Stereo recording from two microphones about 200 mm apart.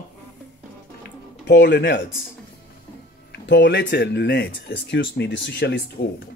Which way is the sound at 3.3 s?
60° left (ahead or behind).